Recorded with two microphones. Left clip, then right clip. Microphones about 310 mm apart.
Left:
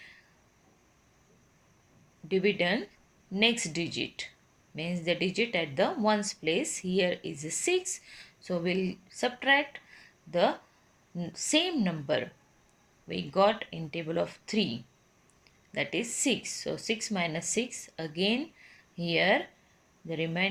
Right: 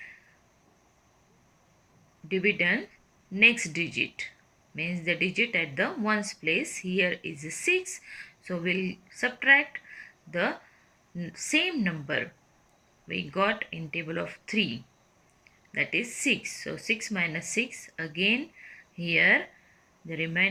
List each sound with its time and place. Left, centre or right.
2.2 s speech: centre
11.2 s speech: centre
13.3 s speech: centre
15.7 s speech: centre